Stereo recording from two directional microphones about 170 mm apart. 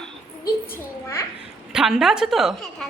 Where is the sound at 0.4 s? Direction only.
15° left (ahead or behind).